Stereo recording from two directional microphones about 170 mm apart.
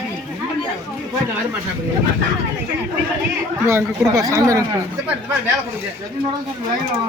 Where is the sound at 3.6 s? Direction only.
20° right (ahead or behind).